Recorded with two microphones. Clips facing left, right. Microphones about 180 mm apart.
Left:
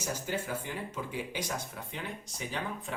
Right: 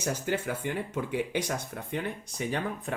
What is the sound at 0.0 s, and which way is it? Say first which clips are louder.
Speech: right 5 dB; 65° right (ahead or behind).